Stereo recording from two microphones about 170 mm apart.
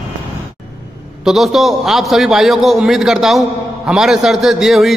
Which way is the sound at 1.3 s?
Centre (ahead or behind).